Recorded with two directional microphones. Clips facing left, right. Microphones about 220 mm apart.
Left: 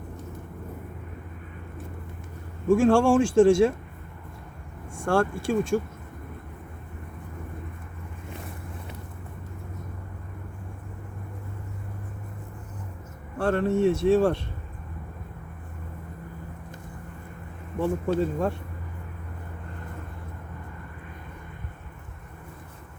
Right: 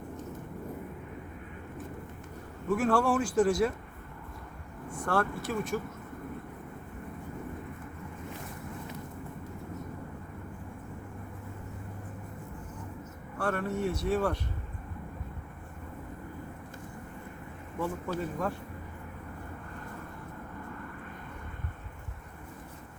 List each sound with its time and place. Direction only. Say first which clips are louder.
2.6 s speech: left 8 dB; 25° left (ahead or behind)
4.9 s speech: left 6 dB; 30° left (ahead or behind)
13.4 s speech: left 9 dB; 25° left (ahead or behind)
17.7 s speech: left 8 dB; 30° left (ahead or behind)